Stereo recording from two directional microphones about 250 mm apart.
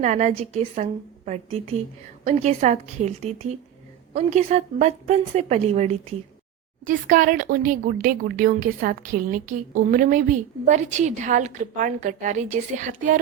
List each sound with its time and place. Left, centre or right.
0.0 s a woman's voice: right